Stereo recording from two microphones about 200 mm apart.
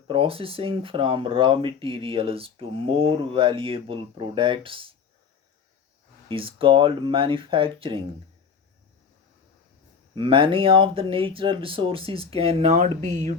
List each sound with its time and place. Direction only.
0.1 s speech: 25° right (ahead or behind)
6.2 s speech: 25° right (ahead or behind)
10.2 s speech: 25° right (ahead or behind)